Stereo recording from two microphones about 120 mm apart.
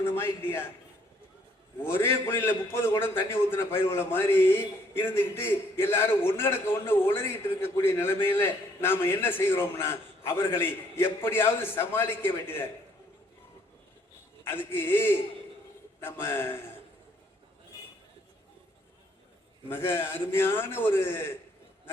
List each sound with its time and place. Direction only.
0.0 s a man's voice: 20° left (ahead or behind)
1.8 s a man's voice: 20° left (ahead or behind)
14.4 s a man's voice: 20° left (ahead or behind)
19.6 s a man's voice: 20° left (ahead or behind)